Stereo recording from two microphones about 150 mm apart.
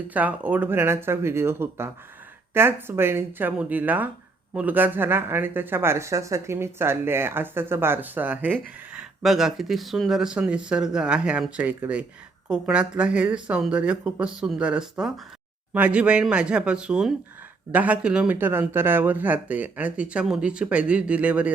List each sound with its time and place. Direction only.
0.1 s speech: 10° right (ahead or behind)